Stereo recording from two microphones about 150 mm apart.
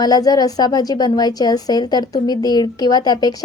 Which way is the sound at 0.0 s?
25° left (ahead or behind).